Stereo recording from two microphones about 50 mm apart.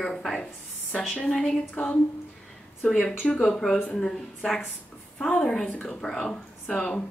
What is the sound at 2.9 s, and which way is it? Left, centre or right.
Speech, centre.